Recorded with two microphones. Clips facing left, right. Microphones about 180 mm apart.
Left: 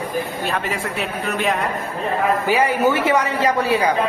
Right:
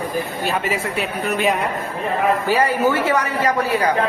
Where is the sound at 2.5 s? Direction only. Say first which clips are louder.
Left 2 dB; 20° left (ahead or behind).